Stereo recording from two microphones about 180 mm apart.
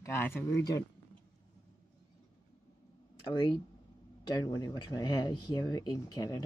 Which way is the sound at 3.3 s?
25° left (ahead or behind).